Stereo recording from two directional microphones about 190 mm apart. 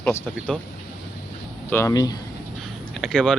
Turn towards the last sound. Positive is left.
turn(degrees=5)  # may be behind; listen again after turning